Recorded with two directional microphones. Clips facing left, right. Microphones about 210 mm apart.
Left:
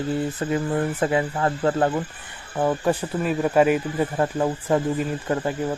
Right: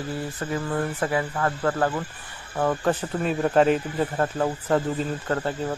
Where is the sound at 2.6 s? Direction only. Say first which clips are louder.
Left 2 dB; 10° left (ahead or behind).